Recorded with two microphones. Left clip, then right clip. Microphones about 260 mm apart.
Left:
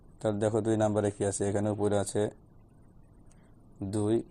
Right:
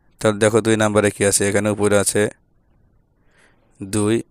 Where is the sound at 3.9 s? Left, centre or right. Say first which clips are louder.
Right 10 dB; right.